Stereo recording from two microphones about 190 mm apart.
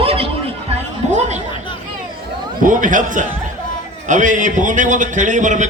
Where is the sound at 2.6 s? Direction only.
45° right (ahead or behind).